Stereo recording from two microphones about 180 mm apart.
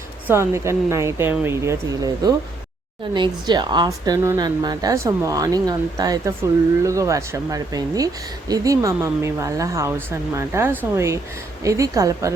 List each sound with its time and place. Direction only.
0.3 s a woman's voice: 15° right (ahead or behind)